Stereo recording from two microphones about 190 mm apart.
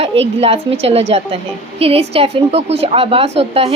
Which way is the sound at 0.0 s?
30° right (ahead or behind).